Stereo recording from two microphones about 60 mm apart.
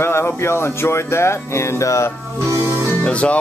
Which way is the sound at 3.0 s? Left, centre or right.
Centre.